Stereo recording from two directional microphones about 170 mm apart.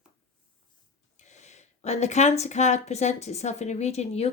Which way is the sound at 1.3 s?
40° left (ahead or behind).